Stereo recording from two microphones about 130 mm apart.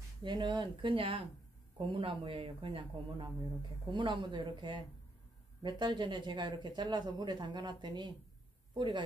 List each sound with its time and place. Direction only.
0.2 s speech: 35° right (ahead or behind)